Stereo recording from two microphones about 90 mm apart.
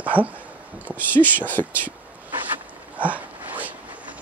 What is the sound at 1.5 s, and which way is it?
Speech, 20° left (ahead or behind).